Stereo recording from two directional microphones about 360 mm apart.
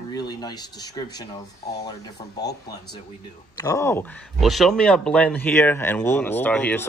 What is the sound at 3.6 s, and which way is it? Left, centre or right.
Speech, centre.